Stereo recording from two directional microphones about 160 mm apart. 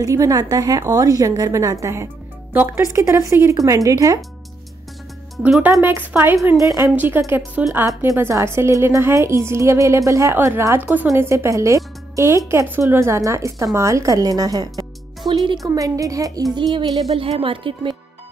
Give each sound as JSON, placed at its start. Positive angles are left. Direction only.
{"t": 0.0, "sound": "a woman's voice", "side_deg": -20}
{"t": 5.4, "sound": "a woman's voice", "side_deg": -10}